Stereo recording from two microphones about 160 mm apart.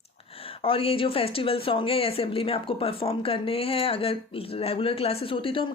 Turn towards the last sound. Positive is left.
turn(degrees=35)  # may be behind; listen again after turning